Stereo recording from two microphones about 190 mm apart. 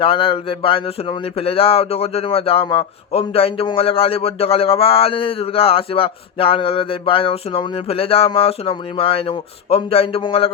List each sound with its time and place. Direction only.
0.0 s speech: 30° left (ahead or behind)